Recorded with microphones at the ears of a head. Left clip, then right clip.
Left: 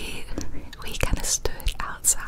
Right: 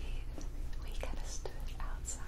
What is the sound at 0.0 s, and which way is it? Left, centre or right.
Whispering, left.